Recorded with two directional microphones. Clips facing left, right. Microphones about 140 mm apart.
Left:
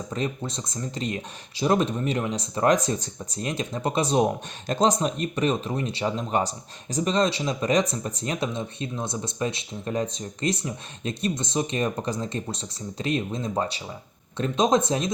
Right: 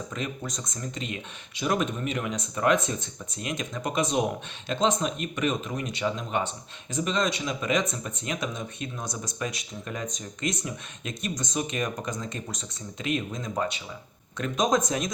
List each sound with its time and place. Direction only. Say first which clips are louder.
0.1 s speech: left 4 dB; 30° left (ahead or behind)